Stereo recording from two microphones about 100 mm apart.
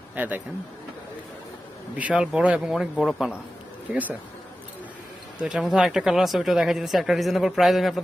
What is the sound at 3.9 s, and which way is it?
Speech, 15° right (ahead or behind).